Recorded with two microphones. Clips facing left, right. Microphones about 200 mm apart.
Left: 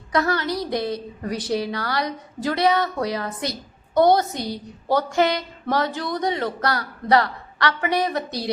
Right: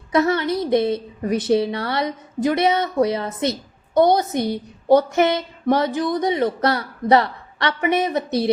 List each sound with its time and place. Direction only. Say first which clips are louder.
0.1 s a woman's voice: right 4 dB; 25° right (ahead or behind)